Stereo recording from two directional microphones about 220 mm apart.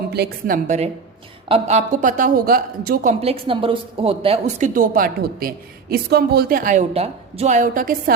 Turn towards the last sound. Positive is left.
turn(degrees=-40)  # may be behind; listen again after turning